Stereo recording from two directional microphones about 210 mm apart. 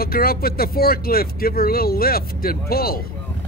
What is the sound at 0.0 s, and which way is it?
Speech, 45° left (ahead or behind).